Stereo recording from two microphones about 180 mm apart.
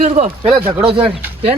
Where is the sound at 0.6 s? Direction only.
10° right (ahead or behind).